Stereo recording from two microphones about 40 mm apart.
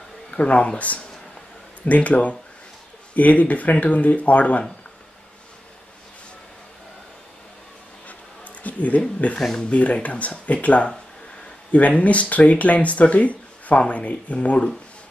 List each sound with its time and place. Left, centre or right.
0.3 s speech: left
8.6 s a sound: left
9.3 s speech: left